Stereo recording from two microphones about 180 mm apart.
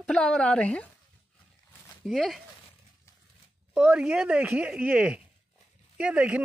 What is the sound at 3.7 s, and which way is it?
Speech, 5° right (ahead or behind).